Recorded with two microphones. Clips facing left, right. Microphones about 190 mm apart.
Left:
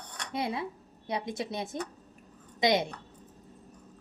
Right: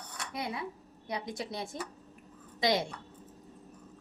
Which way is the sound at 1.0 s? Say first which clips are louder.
Left 4 dB; 25° left (ahead or behind).